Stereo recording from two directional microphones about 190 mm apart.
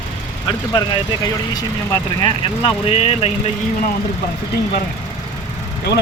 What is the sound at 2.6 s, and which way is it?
Speech, 30° left (ahead or behind).